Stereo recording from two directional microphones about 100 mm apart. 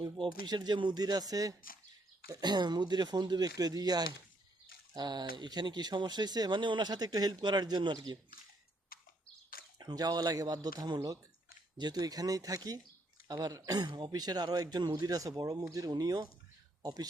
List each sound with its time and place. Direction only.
0.0 s speech: 50° right (ahead or behind)
9.7 s a man's voice: 40° right (ahead or behind)